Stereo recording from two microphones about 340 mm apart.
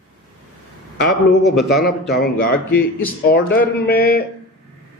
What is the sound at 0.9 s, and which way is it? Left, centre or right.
A man's voice, left.